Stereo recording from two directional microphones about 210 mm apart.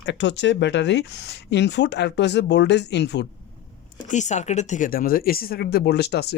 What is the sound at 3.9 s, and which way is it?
Speech, 35° left (ahead or behind).